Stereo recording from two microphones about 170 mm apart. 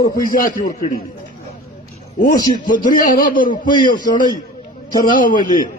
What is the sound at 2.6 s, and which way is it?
Speech, 55° left (ahead or behind).